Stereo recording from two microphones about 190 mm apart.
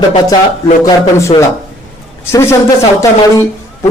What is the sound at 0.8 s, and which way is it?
Speech, 15° left (ahead or behind).